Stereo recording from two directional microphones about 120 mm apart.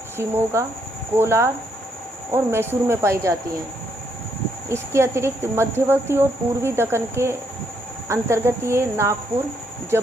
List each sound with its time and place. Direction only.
0.2 s speech: 20° right (ahead or behind)
4.7 s speech: 20° right (ahead or behind)